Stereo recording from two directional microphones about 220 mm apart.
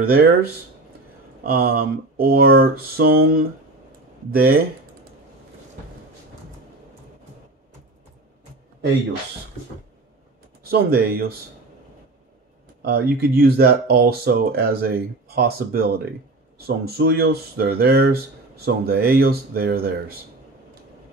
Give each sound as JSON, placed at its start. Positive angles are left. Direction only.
{"t": 0.0, "sound": "speech", "side_deg": -45}
{"t": 10.6, "sound": "speech", "side_deg": -45}
{"t": 12.8, "sound": "speech", "side_deg": -45}